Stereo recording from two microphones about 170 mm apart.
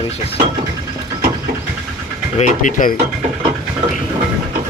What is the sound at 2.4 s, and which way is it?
Speech, 50° left (ahead or behind).